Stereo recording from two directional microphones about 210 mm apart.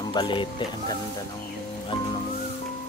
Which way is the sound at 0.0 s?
20° left (ahead or behind).